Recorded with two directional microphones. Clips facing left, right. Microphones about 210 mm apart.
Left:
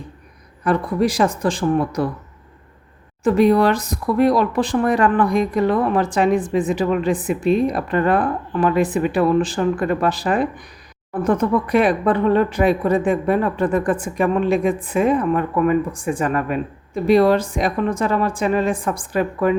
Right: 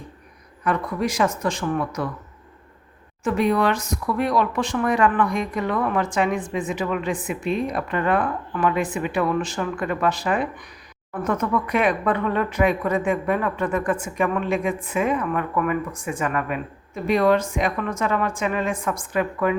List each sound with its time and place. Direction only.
0.6 s speech: 35° left (ahead or behind)
3.2 s speech: 35° left (ahead or behind)